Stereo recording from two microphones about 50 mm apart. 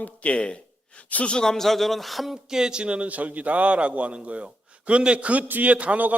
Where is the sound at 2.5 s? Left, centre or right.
Centre.